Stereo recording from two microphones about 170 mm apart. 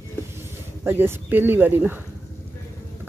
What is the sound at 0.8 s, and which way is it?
A woman's voice, 15° right (ahead or behind).